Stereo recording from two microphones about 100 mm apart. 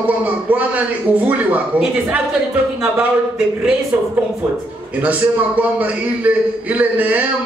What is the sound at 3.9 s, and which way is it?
A man's voice, 20° right (ahead or behind).